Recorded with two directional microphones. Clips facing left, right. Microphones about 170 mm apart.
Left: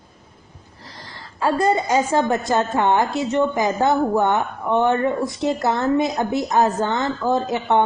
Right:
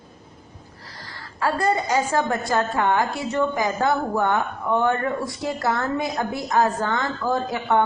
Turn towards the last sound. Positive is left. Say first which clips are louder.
# left 3 dB
turn(degrees=20)  # may be behind; listen again after turning